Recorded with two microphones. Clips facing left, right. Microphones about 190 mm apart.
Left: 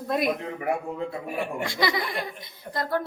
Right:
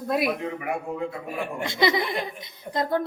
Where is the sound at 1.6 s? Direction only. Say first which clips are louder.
Right 6 dB; 20° right (ahead or behind).